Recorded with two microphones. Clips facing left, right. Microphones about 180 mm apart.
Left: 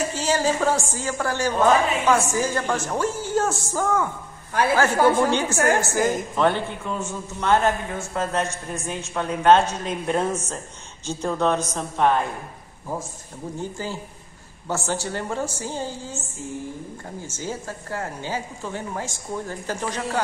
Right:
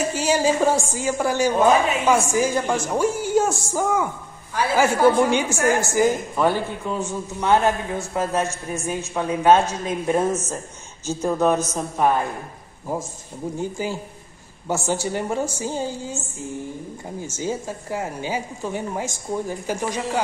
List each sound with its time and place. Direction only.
0.1 s a woman's voice: 10° right (ahead or behind)
5.3 s a woman's voice: 10° right (ahead or behind)
13.6 s a woman's voice: 15° right (ahead or behind)
17.2 s a woman's voice: 15° right (ahead or behind)